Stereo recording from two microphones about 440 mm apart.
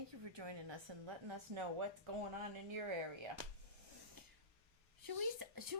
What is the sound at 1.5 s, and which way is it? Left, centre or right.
Speech, right.